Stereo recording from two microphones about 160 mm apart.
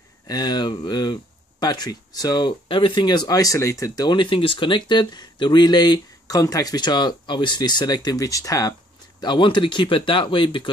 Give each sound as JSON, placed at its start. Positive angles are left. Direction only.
{"t": 0.3, "sound": "speech", "side_deg": 25}